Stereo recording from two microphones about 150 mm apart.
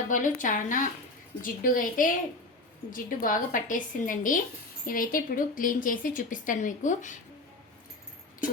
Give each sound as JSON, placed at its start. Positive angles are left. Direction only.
{"t": 0.1, "sound": "speech", "side_deg": 60}